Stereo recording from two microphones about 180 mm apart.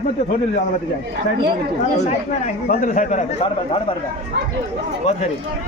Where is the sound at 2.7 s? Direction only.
45° left (ahead or behind).